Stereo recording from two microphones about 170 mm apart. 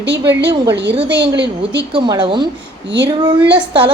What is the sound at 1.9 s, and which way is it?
Speech, 30° right (ahead or behind).